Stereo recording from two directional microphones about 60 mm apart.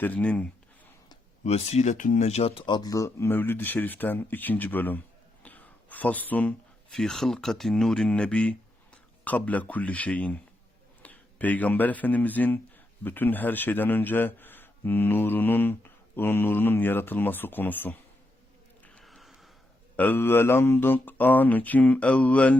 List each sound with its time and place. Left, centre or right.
0.0 s speech: left
2.8 s speech: left
3.2 s speech: left
6.9 s a man's voice: centre; by 17.9 s left
19.0 s a sound: centre
20.1 s a man's voice: left
20.7 s speech: left